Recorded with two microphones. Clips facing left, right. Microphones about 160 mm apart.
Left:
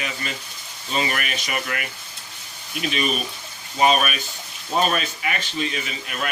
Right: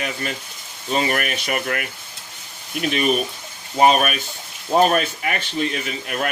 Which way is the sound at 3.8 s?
50° right (ahead or behind).